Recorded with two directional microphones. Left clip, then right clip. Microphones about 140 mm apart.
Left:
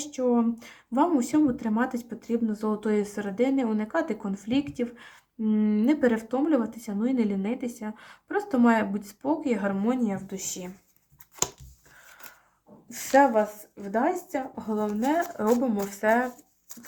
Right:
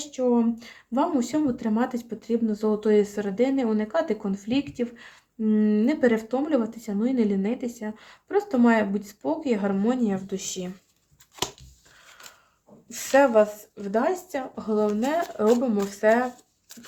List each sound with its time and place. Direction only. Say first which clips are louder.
0.0 s speech: right 2 dB; 25° right (ahead or behind)
12.9 s speech: right 1 dB; 35° right (ahead or behind)